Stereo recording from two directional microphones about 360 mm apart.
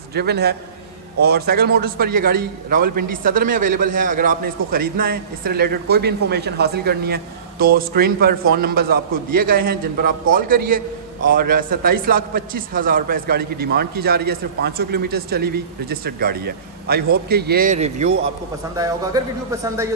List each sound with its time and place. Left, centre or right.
0.1 s a man's voice: right; by 19.9 s centre